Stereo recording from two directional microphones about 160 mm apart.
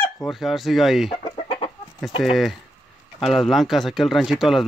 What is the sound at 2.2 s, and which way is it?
Speech, centre (ahead or behind).